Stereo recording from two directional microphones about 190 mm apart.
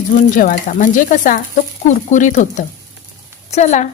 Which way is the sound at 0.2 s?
45° left (ahead or behind).